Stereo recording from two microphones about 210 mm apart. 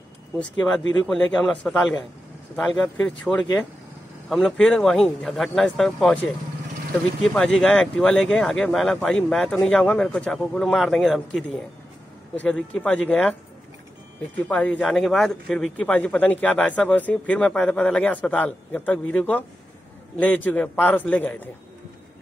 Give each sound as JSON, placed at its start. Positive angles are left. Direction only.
{"t": 0.4, "sound": "a man's voice", "side_deg": 5}
{"t": 7.3, "sound": "a man's voice", "side_deg": 0}
{"t": 14.5, "sound": "a man's voice", "side_deg": 5}